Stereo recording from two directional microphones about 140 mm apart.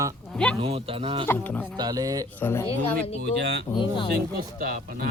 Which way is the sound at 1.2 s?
15° left (ahead or behind).